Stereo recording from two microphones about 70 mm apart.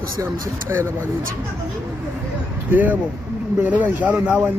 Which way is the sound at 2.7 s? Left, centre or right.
Right.